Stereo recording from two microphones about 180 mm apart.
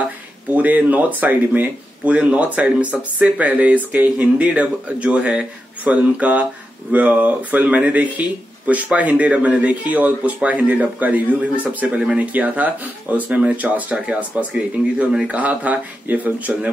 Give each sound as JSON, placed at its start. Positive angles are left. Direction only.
{"t": 0.0, "sound": "speech", "side_deg": -10}